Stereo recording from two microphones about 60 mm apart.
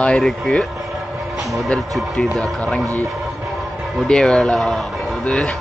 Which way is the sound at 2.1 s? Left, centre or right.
Centre.